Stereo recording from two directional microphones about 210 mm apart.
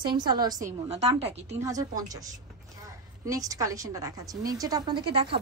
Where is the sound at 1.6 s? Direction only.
15° right (ahead or behind).